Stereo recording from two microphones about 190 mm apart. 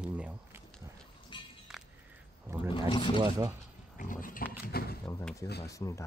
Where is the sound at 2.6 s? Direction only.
25° left (ahead or behind).